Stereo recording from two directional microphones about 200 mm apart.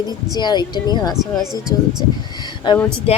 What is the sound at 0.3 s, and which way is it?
Speech, 20° left (ahead or behind).